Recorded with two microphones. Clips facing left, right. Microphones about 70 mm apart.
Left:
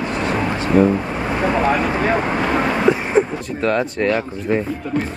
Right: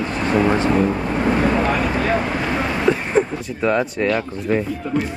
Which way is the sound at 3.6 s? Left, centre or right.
Centre.